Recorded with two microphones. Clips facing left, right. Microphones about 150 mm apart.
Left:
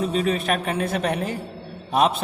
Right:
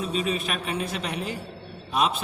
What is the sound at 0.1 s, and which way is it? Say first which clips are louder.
A man's voice: left 5 dB; 60° left (ahead or behind).